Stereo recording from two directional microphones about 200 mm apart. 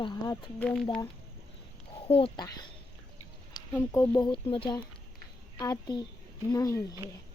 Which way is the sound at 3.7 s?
15° left (ahead or behind).